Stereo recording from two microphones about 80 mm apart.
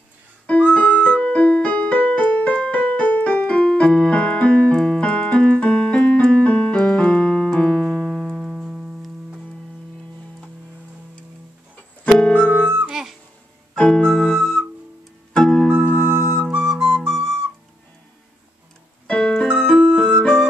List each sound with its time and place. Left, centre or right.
0.5 s music: centre
12.1 s keyboard: centre
12.8 s music: centre
13.7 s piano: centre
15.3 s music: centre
16.1 s music: right
16.5 s flute: centre
16.8 s flute: centre
19.0 s keyboard: centre
19.5 s music: centre
20.0 s keyboard: centre